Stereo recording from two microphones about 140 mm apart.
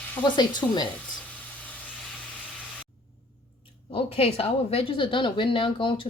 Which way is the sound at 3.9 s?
40° left (ahead or behind).